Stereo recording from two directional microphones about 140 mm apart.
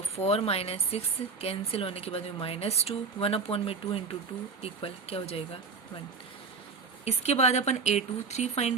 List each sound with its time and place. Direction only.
0.2 s speech: 45° left (ahead or behind)
7.0 s speech: 50° left (ahead or behind)